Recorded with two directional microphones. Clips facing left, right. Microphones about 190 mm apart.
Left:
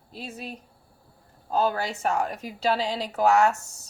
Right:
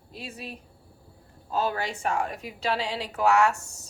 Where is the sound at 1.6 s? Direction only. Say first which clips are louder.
Left 3 dB; 40° left (ahead or behind).